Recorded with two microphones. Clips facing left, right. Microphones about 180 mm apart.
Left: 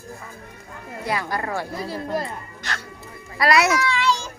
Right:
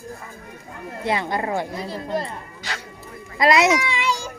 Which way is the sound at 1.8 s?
5° left (ahead or behind).